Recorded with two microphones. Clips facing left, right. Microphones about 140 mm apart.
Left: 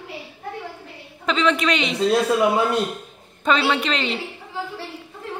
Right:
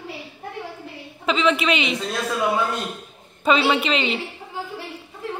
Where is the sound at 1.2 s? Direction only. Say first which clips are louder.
Even; 5° right (ahead or behind).